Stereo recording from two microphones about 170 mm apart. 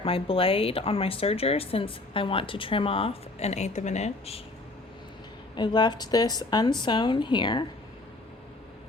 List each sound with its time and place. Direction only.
0.0 s speech: 35° left (ahead or behind)
5.5 s a woman's voice: 25° left (ahead or behind)